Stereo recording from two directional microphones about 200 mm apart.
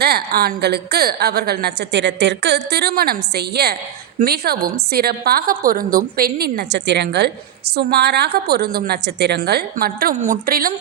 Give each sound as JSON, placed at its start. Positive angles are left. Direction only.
{"t": 0.0, "sound": "a woman's voice", "side_deg": -55}